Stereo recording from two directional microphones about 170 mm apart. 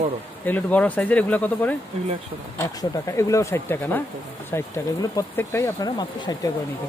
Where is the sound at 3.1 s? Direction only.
20° left (ahead or behind).